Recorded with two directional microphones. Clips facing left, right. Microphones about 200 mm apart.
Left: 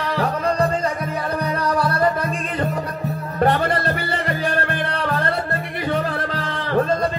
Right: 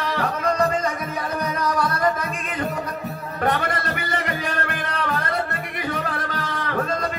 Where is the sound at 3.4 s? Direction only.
30° left (ahead or behind).